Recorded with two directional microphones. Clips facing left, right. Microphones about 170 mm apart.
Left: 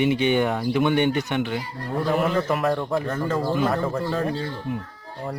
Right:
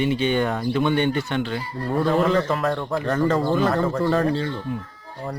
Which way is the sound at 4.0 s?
75° right (ahead or behind).